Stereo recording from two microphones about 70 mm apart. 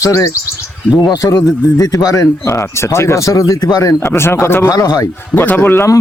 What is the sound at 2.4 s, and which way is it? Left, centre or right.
Speech, left.